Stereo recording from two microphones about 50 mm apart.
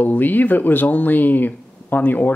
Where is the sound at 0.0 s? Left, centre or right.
Left.